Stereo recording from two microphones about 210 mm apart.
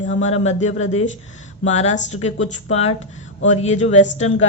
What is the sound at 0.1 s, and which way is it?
Speech, 35° left (ahead or behind).